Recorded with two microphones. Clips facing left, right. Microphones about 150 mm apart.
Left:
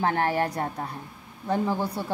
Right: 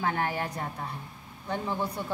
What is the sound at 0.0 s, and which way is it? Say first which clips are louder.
A woman's voice: left 5 dB; 40° left (ahead or behind).